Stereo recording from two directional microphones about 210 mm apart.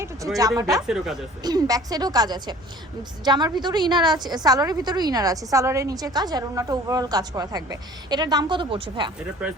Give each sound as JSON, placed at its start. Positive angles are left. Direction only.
{"t": 0.3, "sound": "speech", "side_deg": -15}
{"t": 0.9, "sound": "speech", "side_deg": 0}
{"t": 1.4, "sound": "a woman's voice", "side_deg": -20}